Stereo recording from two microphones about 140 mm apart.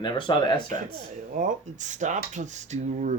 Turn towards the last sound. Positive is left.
turn(degrees=-60)  # may be behind; listen again after turning